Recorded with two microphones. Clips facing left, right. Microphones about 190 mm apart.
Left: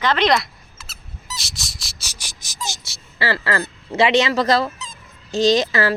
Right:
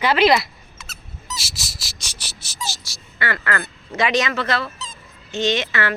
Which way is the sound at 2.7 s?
25° left (ahead or behind).